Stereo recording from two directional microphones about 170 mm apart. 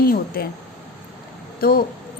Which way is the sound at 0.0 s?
60° left (ahead or behind).